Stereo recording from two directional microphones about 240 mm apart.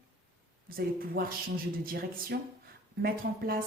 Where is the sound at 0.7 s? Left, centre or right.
Right.